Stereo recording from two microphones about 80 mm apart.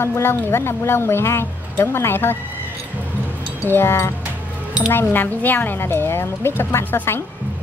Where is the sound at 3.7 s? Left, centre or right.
Left.